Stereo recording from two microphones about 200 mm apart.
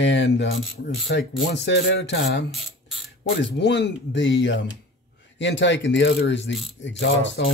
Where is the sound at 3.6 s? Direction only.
60° left (ahead or behind).